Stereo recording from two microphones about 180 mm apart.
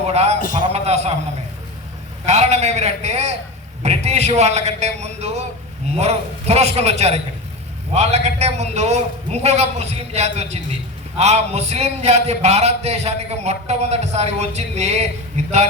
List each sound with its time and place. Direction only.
0.1 s a man's voice: 35° right (ahead or behind)
0.3 s a man's voice: 50° left (ahead or behind)
0.7 s a sound: 35° right (ahead or behind)
2.2 s a man's voice: 40° right (ahead or behind)